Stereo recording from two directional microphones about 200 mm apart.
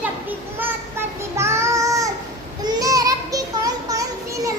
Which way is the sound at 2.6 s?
20° right (ahead or behind).